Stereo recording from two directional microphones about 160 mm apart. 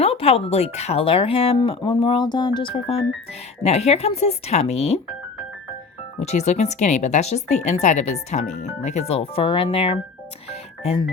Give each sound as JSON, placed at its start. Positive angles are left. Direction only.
{"t": 0.0, "sound": "speech", "side_deg": 40}
{"t": 6.1, "sound": "speech", "side_deg": 45}